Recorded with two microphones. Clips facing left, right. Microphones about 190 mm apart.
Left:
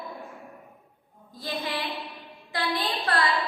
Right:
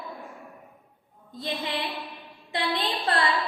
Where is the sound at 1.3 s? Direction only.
20° right (ahead or behind).